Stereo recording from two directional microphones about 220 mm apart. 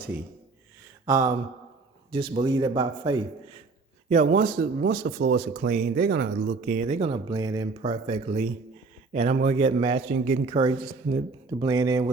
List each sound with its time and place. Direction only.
1.0 s speech: 15° right (ahead or behind)
4.1 s speech: 35° right (ahead or behind)
6.1 s speech: 60° right (ahead or behind)
6.6 s speech: 40° right (ahead or behind)
7.3 s speech: 20° right (ahead or behind)
7.8 s speech: 30° right (ahead or behind)